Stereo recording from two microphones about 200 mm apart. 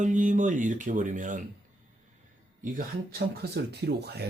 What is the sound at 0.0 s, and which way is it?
Speech, 40° right (ahead or behind).